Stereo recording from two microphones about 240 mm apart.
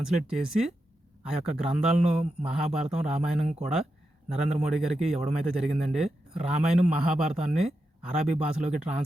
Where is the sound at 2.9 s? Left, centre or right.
Centre.